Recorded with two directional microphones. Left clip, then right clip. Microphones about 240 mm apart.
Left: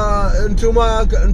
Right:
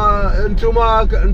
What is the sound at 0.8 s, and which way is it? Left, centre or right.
Speech, left.